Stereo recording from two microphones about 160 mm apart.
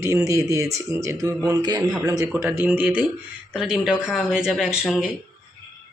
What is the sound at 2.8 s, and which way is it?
Speech, 10° right (ahead or behind).